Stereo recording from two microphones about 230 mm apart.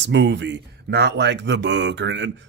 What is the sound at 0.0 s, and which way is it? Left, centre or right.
A man's voice, right.